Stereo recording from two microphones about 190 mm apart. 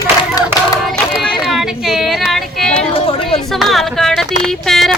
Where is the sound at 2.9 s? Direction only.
30° left (ahead or behind).